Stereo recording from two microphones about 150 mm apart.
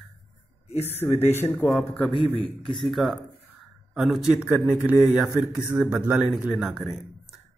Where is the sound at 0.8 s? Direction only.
15° left (ahead or behind); by 6.8 s centre (ahead or behind).